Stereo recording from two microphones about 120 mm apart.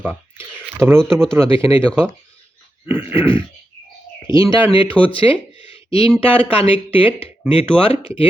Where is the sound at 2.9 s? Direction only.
15° right (ahead or behind).